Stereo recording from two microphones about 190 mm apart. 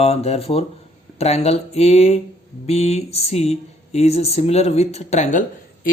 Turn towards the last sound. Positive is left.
turn(degrees=40)  # may be behind; listen again after turning